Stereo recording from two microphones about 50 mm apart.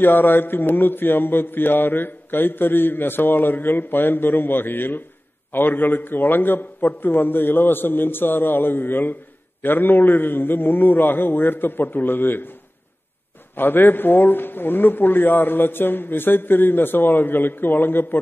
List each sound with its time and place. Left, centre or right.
0.0 s mantra: left
13.6 s mantra: left